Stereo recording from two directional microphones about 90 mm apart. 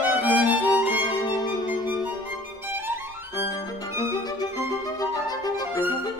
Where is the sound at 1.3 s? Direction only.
50° left (ahead or behind).